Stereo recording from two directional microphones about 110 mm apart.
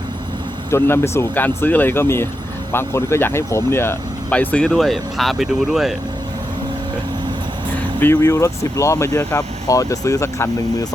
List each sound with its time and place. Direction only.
0.7 s speech: 25° left (ahead or behind); by 5.9 s centre (ahead or behind)
7.9 s speech: 20° left (ahead or behind)